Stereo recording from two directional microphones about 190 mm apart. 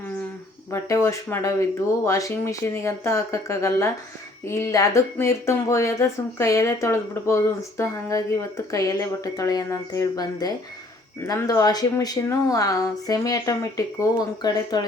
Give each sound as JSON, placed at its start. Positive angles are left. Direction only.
{"t": 0.7, "sound": "a woman's voice", "side_deg": 15}